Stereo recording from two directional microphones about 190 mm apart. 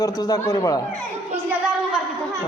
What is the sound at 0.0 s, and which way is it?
Speech, 20° left (ahead or behind).